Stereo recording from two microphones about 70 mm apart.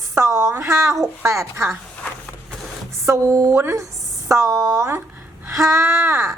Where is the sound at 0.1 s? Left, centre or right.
Right.